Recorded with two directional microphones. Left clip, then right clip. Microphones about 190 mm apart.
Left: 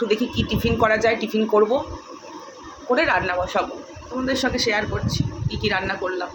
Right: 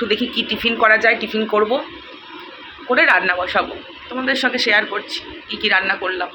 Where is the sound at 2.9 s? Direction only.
5° left (ahead or behind).